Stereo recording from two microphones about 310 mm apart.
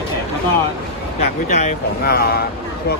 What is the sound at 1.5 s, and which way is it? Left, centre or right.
Speech, left.